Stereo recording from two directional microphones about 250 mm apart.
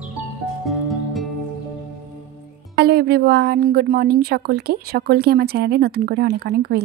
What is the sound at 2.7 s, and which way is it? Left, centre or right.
Speech, right.